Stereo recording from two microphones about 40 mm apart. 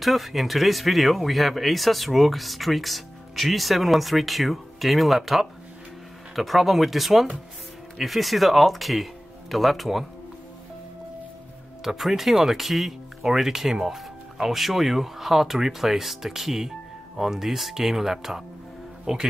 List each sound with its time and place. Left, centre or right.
0.0 s speech: centre
11.8 s speech: centre